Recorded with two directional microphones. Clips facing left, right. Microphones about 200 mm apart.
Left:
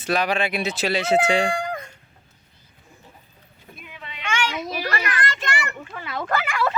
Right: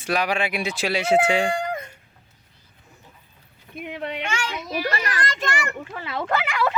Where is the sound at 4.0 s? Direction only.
65° right (ahead or behind).